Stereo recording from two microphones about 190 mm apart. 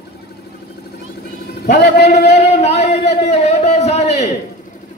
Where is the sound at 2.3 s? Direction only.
35° left (ahead or behind).